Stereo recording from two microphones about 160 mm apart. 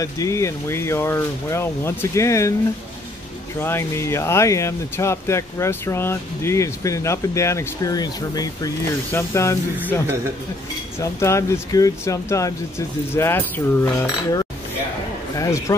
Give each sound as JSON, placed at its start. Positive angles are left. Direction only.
{"t": 0.0, "sound": "speech", "side_deg": 20}
{"t": 3.6, "sound": "speech", "side_deg": 15}
{"t": 11.0, "sound": "speech", "side_deg": 20}
{"t": 13.8, "sound": "cutlery", "side_deg": 25}
{"t": 15.3, "sound": "speech", "side_deg": 20}